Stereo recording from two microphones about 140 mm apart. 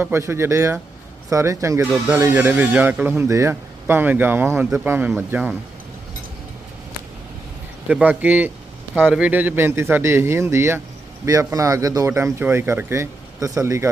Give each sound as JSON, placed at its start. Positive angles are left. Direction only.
{"t": 0.0, "sound": "speech", "side_deg": -20}
{"t": 7.9, "sound": "speech", "side_deg": -10}